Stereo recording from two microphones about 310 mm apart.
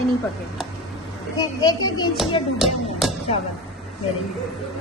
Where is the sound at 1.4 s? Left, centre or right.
Centre.